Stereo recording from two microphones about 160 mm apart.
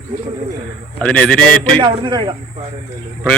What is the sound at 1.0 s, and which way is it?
Speech, 5° left (ahead or behind).